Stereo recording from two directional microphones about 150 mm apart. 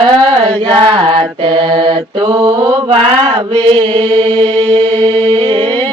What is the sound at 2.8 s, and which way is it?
Mantra, 40° right (ahead or behind).